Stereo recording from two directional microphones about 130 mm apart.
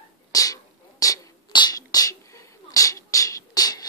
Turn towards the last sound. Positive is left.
turn(degrees=30)  # may be behind; listen again after turning